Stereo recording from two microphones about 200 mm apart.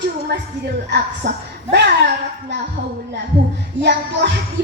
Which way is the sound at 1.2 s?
60° right (ahead or behind).